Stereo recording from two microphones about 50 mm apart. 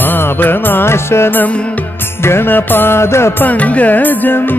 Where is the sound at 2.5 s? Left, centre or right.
Left.